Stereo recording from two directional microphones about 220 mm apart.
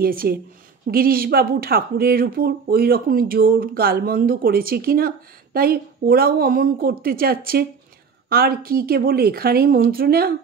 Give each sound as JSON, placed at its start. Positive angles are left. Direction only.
{"t": 0.0, "sound": "a woman's voice", "side_deg": -40}